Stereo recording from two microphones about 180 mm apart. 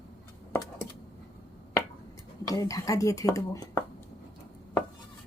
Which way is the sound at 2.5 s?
20° left (ahead or behind).